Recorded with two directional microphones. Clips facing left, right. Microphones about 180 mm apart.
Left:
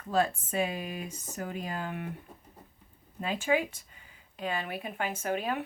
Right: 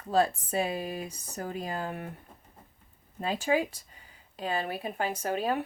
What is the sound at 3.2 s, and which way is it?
Speech, 35° right (ahead or behind).